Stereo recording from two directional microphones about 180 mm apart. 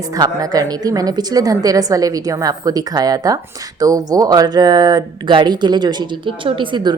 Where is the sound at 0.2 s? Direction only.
20° right (ahead or behind).